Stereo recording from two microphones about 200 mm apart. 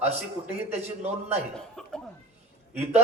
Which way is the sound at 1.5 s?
5° left (ahead or behind).